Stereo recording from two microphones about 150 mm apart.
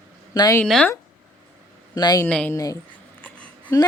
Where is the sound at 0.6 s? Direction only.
5° left (ahead or behind).